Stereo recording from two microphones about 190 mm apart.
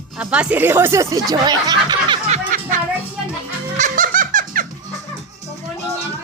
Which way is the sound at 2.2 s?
40° right (ahead or behind).